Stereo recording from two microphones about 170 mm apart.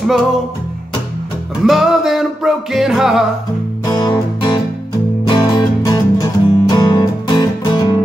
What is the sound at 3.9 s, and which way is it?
Music, 25° left (ahead or behind).